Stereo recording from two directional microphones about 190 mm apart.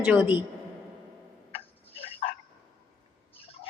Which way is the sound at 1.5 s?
30° left (ahead or behind).